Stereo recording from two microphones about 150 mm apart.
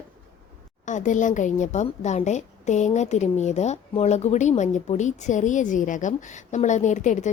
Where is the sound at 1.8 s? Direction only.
45° left (ahead or behind).